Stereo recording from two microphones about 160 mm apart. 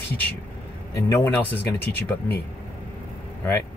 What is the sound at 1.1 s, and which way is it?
Speech, 15° left (ahead or behind).